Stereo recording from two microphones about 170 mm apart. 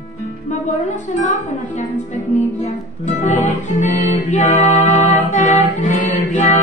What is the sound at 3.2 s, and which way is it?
Music, 45° left (ahead or behind).